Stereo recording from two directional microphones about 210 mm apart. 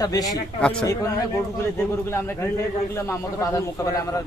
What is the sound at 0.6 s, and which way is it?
Speech, 5° left (ahead or behind).